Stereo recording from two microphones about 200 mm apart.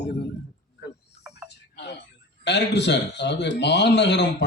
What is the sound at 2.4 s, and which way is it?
Speech, 60° left (ahead or behind).